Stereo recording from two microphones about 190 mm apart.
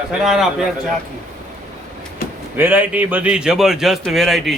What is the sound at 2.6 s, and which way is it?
A man's voice, 10° right (ahead or behind).